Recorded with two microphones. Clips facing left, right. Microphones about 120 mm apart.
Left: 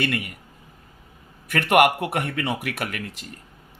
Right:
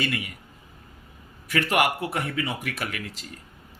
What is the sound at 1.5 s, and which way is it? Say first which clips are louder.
Speech: left 5 dB; 60° left (ahead or behind).